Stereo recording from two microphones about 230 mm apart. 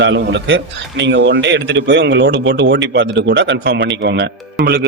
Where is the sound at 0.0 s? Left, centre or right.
Right.